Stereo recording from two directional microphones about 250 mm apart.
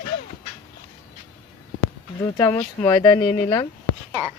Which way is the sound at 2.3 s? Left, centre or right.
Centre.